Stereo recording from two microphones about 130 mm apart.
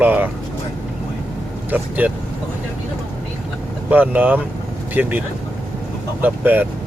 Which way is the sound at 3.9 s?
15° right (ahead or behind).